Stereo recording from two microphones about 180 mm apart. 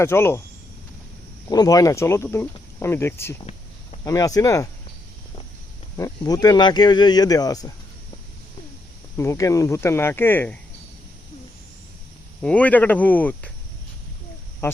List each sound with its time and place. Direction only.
0.0 s speech: 15° left (ahead or behind)
1.5 s speech: 20° left (ahead or behind)
6.0 s speech: 20° left (ahead or behind)
9.1 s speech: 15° left (ahead or behind)
12.4 s speech: 5° left (ahead or behind)
14.6 s speech: 15° left (ahead or behind)